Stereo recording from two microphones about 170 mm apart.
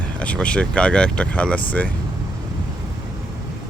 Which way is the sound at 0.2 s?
5° left (ahead or behind).